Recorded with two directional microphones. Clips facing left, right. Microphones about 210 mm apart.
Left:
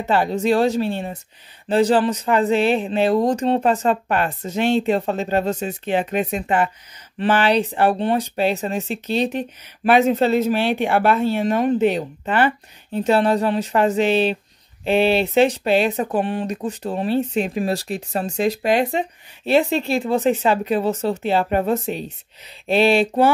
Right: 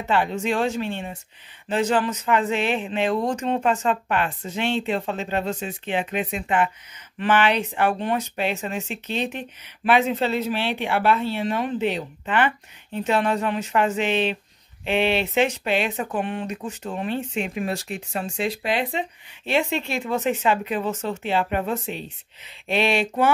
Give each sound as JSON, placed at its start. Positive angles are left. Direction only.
{"t": 0.1, "sound": "speech", "side_deg": 40}